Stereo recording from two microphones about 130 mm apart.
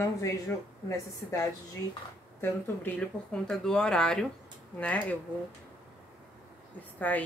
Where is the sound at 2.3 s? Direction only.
15° left (ahead or behind).